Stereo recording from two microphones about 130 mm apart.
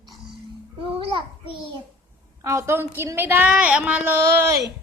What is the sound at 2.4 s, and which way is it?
A woman's voice, 20° right (ahead or behind).